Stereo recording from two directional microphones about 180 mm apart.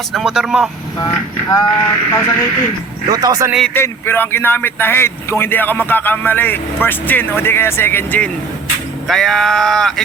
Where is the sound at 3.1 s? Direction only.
20° right (ahead or behind).